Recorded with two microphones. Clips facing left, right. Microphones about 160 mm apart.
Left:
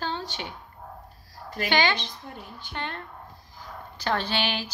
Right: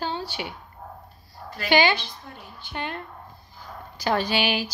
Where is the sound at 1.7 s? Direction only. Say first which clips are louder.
Right 4 dB; 10° right (ahead or behind).